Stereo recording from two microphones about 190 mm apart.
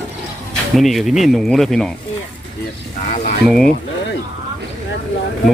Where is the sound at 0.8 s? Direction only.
Centre (ahead or behind).